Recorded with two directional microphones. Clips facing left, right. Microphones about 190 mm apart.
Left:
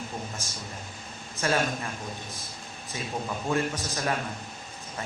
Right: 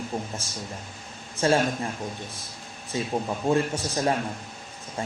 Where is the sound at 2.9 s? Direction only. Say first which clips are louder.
Right 5 dB; 30° right (ahead or behind).